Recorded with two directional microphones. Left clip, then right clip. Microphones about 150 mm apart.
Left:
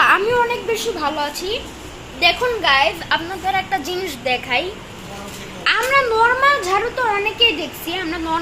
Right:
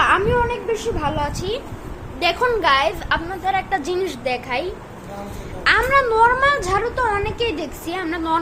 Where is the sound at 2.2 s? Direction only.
35° right (ahead or behind).